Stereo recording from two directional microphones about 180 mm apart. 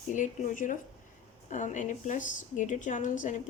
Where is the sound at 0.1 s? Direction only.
45° left (ahead or behind).